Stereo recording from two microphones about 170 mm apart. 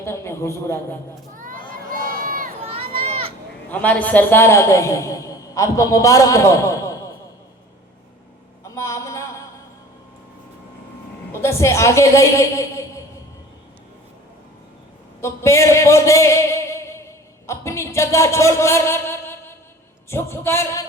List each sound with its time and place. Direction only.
0.0 s a man's voice: 15° left (ahead or behind)
1.3 s crowd: 50° right (ahead or behind)
2.6 s a sound: 35° right (ahead or behind)
3.7 s a man's voice: 10° left (ahead or behind)
8.6 s a sound: 20° left (ahead or behind)
11.3 s a woman's voice: 15° left (ahead or behind)
15.2 s a man's voice: 15° left (ahead or behind)